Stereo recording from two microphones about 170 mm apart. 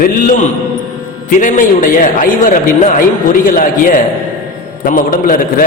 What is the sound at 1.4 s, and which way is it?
A man's voice, 50° left (ahead or behind).